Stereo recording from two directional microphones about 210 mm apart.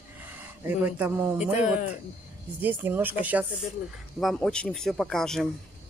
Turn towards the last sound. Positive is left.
turn(degrees=0)  # may be behind; listen again after turning